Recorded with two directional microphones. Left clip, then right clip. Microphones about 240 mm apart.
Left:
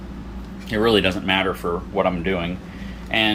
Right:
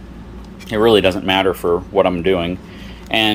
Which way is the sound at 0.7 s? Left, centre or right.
Centre.